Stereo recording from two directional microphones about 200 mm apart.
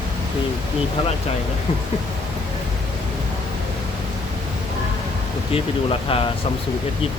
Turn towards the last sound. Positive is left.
turn(degrees=30)  # may be behind; listen again after turning